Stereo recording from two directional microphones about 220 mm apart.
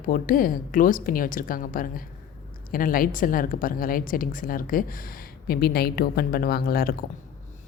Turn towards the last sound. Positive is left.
turn(degrees=40)  # may be behind; listen again after turning